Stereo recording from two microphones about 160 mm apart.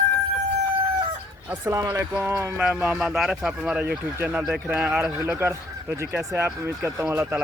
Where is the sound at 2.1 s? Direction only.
5° right (ahead or behind).